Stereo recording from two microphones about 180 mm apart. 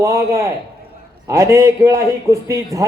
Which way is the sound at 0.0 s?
15° right (ahead or behind).